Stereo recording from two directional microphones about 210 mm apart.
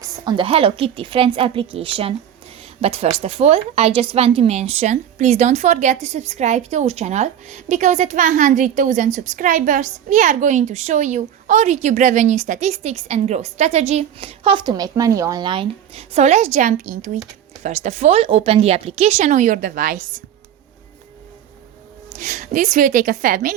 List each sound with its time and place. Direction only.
0.0 s a woman's voice: 20° right (ahead or behind); by 20.2 s 40° right (ahead or behind)
22.2 s a woman's voice: 40° right (ahead or behind)